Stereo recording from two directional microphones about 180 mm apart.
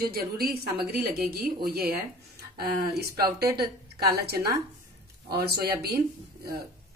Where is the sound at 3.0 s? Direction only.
20° right (ahead or behind).